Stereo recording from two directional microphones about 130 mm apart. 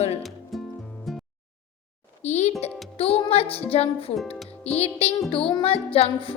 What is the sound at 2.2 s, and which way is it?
Speech, 60° left (ahead or behind).